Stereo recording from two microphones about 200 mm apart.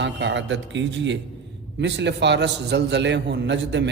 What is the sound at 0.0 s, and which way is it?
A man's voice, 65° right (ahead or behind).